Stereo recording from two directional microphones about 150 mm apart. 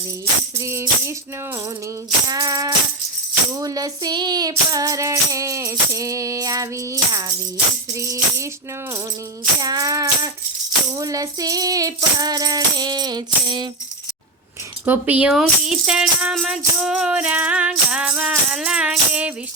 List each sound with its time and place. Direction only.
0.6 s speech: 20° right (ahead or behind)
2.2 s music: 25° right (ahead or behind)
9.6 s music: 25° right (ahead or behind)
14.8 s speech: 10° right (ahead or behind)